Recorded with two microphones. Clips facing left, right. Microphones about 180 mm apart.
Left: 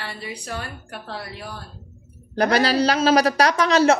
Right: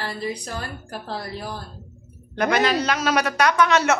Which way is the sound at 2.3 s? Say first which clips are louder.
Left 1 dB; 35° left (ahead or behind).